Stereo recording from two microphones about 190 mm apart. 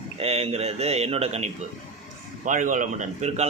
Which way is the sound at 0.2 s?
30° right (ahead or behind).